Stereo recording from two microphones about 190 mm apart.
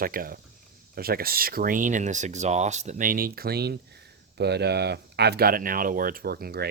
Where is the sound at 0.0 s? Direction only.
50° right (ahead or behind).